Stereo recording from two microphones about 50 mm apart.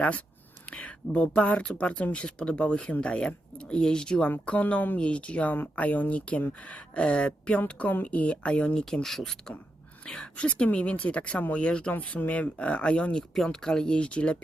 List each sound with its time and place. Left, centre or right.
0.7 s speech: left
4.4 s speech: left
4.9 s speech: left
7.8 s speech: left
8.7 s speech: centre
10.3 s speech: left
13.3 s speech: centre